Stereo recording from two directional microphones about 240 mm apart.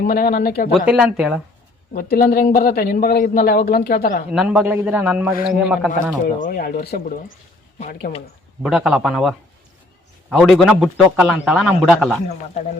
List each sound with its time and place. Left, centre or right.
0.0 s a man's voice: left
0.9 s a man's voice: centre
1.9 s a man's voice: left
4.3 s a man's voice: centre
6.2 s a man's voice: left
8.6 s a man's voice: centre